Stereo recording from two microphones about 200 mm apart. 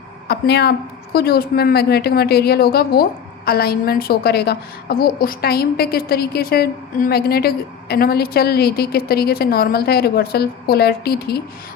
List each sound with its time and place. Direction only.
0.3 s a woman's voice: 55° left (ahead or behind)